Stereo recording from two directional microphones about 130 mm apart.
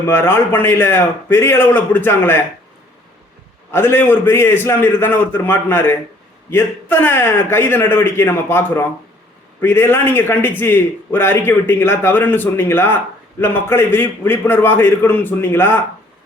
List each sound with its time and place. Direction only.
0.1 s a man's voice: 15° left (ahead or behind)
3.7 s a man's voice: 20° left (ahead or behind)